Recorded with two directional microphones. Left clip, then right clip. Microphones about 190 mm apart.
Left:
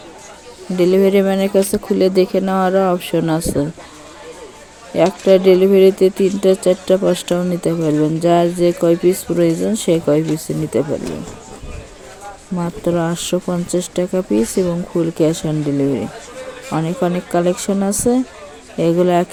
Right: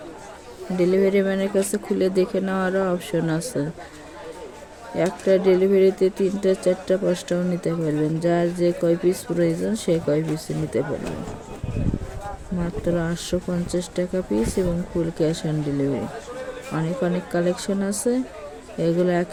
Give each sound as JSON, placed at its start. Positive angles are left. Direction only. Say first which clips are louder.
{"t": 0.8, "sound": "speech", "louder": "left 6 dB", "side_deg": 40}
{"t": 4.9, "sound": "speech", "louder": "left 8 dB", "side_deg": 35}
{"t": 12.5, "sound": "speech", "louder": "left 7 dB", "side_deg": 35}